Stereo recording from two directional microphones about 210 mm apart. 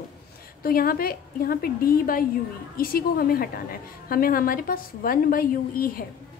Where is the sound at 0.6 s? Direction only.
45° left (ahead or behind).